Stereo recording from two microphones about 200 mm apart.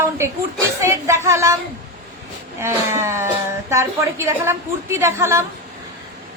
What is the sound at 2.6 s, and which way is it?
A woman's voice, 15° right (ahead or behind).